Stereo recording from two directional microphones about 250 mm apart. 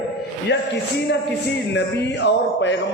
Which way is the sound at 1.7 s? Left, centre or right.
Left.